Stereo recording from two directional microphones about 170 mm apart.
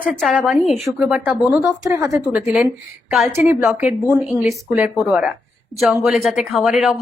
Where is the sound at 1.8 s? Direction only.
15° right (ahead or behind).